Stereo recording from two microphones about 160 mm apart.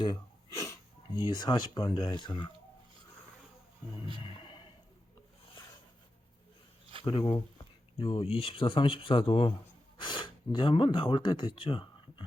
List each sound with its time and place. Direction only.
0.5 s wheeze: 20° left (ahead or behind)
1.4 s speech: 25° left (ahead or behind)
4.2 s a sound: 30° left (ahead or behind)
7.0 s speech: 30° left (ahead or behind)